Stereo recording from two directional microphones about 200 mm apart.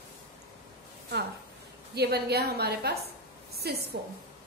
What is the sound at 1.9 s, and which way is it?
A woman's voice, 55° right (ahead or behind).